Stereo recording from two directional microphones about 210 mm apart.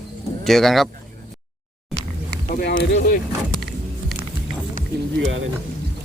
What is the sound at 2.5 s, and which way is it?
Speech, 50° left (ahead or behind).